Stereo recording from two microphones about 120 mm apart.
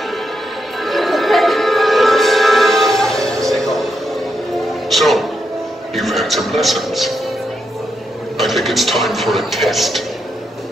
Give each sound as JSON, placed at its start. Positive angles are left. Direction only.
{"t": 0.7, "sound": "music", "side_deg": 0}
{"t": 5.9, "sound": "a man's voice", "side_deg": 0}
{"t": 8.4, "sound": "speech", "side_deg": 0}